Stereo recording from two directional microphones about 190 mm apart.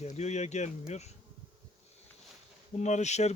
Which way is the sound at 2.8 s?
40° left (ahead or behind).